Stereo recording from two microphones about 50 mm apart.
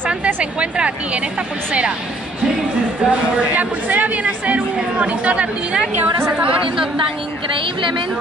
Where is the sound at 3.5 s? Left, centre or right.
Right.